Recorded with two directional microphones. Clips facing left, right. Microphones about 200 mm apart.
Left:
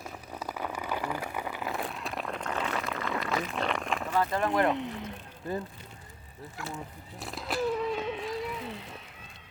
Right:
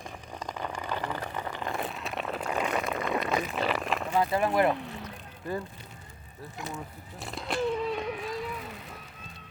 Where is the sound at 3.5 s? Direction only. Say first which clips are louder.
Right 2 dB; 5° right (ahead or behind).